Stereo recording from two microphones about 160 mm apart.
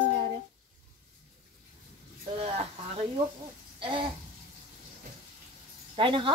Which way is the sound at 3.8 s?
30° right (ahead or behind).